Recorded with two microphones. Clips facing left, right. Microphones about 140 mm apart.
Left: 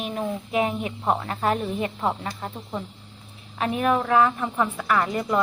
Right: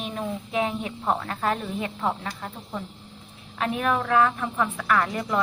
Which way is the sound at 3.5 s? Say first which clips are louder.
Left 2 dB; 5° left (ahead or behind).